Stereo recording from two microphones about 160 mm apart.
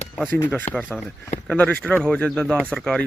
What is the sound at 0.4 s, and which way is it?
Speech, 10° left (ahead or behind).